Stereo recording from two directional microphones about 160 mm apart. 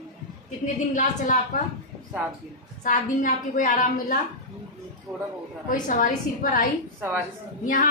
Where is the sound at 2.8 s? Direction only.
55° left (ahead or behind).